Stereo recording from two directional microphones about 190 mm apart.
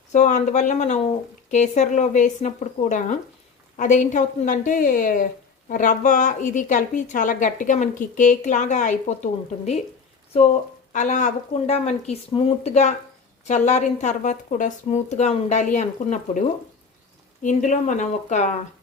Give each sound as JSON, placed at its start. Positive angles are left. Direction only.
{"t": 0.1, "sound": "a woman's voice", "side_deg": 40}
{"t": 10.9, "sound": "a woman's voice", "side_deg": 40}
{"t": 17.4, "sound": "a woman's voice", "side_deg": 40}